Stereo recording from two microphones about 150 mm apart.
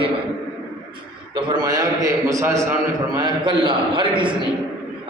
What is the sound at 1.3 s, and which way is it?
A man's voice, 30° right (ahead or behind).